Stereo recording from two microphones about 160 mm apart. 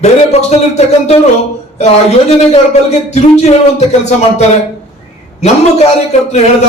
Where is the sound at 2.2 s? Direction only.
45° left (ahead or behind).